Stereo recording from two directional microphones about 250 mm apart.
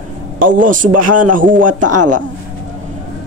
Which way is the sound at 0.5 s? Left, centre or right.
Right.